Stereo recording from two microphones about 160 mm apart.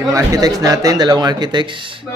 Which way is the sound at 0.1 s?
20° right (ahead or behind).